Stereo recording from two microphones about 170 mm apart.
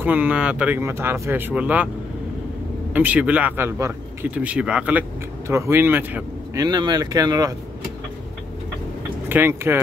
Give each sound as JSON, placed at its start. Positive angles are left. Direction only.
{"t": 0.0, "sound": "a man's voice", "side_deg": -10}
{"t": 2.9, "sound": "a man's voice", "side_deg": -10}
{"t": 9.3, "sound": "a man's voice", "side_deg": -15}